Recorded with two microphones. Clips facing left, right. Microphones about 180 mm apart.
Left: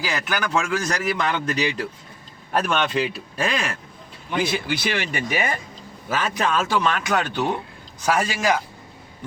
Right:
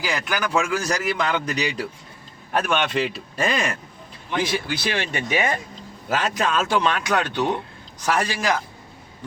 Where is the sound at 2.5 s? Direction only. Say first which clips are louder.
Even; centre (ahead or behind).